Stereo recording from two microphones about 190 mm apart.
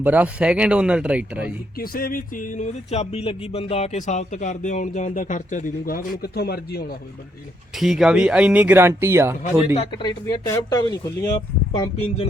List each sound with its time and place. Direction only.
0.0 s speech: 10° right (ahead or behind)
1.8 s a sound: 50° left (ahead or behind)
2.9 s speech: 35° left (ahead or behind); by 6.8 s 55° left (ahead or behind)
7.8 s speech: centre (ahead or behind)
10.0 s speech: 20° left (ahead or behind)